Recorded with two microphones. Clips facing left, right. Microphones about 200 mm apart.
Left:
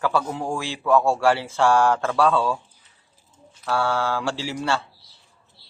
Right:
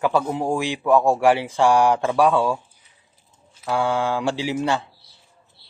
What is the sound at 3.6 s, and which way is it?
Speech, 15° right (ahead or behind).